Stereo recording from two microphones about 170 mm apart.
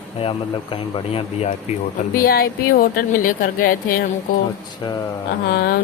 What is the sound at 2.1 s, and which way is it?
Speech, 60° left (ahead or behind).